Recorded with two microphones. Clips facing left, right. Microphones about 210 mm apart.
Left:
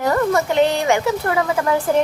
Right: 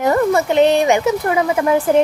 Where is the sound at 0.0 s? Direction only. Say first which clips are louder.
Right 3 dB; 20° right (ahead or behind).